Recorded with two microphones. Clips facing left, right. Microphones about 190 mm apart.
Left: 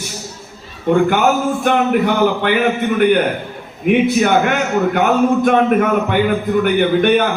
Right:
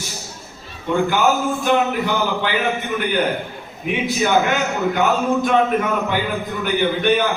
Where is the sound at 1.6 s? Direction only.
55° left (ahead or behind).